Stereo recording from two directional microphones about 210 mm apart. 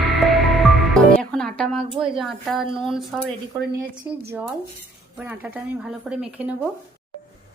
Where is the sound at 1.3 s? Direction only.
5° left (ahead or behind).